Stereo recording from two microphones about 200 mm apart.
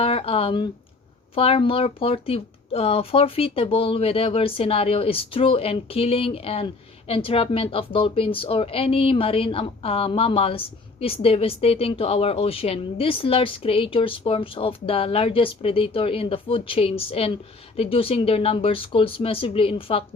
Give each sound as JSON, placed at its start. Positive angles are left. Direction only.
{"t": 0.0, "sound": "a woman's voice", "side_deg": 30}